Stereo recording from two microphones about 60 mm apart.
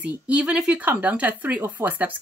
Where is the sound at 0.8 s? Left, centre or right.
Right.